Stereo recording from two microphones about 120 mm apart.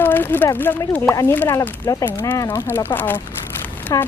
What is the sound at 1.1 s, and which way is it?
Speech, 25° left (ahead or behind).